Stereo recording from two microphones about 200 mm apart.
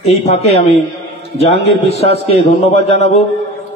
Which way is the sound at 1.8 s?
30° left (ahead or behind).